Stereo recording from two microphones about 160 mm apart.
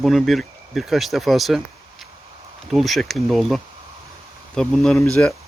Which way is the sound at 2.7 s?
Centre (ahead or behind).